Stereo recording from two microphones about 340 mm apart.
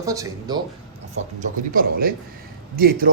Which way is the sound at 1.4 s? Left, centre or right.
Right.